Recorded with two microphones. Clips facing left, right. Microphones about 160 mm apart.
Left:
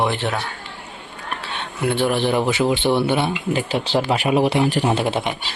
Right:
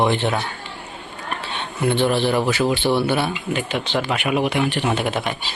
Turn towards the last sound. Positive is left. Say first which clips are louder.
# left 2 dB
turn(degrees=25)  # may be behind; listen again after turning